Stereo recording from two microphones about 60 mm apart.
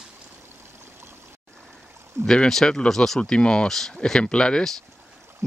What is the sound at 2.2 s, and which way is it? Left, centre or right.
Speech, centre.